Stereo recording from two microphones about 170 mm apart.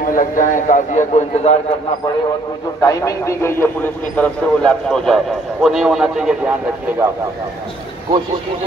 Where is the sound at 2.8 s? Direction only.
20° left (ahead or behind); by 6.5 s 5° right (ahead or behind).